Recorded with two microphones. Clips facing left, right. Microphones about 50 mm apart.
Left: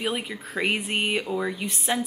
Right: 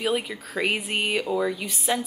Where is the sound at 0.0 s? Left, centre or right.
Centre.